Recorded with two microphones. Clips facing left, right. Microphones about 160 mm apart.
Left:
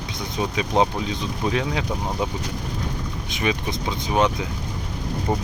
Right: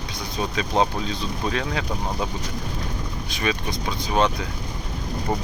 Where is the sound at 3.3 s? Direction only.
20° left (ahead or behind).